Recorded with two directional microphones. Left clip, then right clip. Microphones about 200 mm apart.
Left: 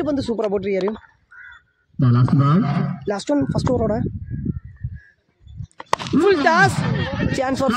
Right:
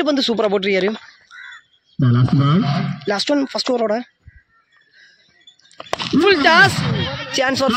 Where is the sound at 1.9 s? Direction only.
25° right (ahead or behind).